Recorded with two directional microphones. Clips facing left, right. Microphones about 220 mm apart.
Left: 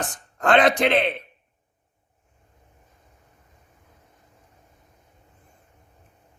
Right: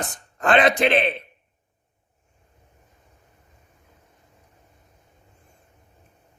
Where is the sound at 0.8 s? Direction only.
20° right (ahead or behind).